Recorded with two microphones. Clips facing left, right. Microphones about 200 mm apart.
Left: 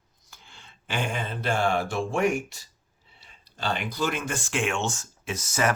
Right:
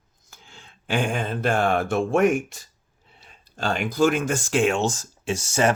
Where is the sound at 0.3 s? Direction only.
45° right (ahead or behind).